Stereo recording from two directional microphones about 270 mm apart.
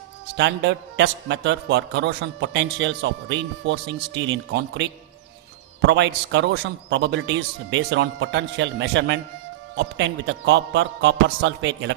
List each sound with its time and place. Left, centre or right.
0.3 s a man's voice: right